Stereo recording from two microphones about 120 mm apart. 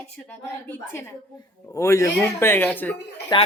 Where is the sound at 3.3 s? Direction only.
40° left (ahead or behind).